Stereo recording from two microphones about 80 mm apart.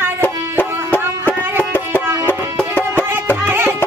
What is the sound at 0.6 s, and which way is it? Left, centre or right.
Music, left.